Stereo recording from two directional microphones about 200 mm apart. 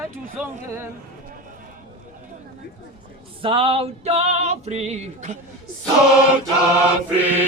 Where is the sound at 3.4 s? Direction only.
25° right (ahead or behind).